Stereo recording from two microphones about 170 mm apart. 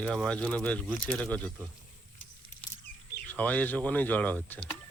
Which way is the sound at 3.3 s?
10° left (ahead or behind).